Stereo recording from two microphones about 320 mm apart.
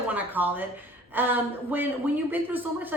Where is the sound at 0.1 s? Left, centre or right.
Centre.